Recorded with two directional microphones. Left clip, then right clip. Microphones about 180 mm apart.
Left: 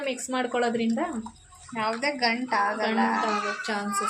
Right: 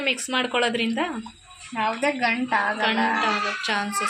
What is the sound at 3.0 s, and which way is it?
Speech, 20° right (ahead or behind).